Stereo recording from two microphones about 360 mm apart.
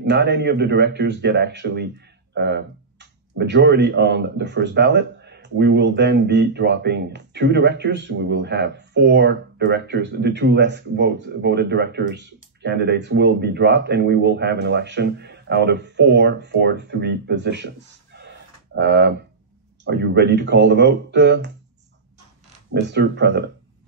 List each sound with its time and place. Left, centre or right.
0.0 s speech: right
22.7 s speech: right